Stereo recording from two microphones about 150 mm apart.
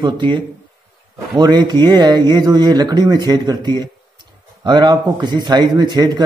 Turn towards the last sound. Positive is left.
turn(degrees=-30)  # may be behind; listen again after turning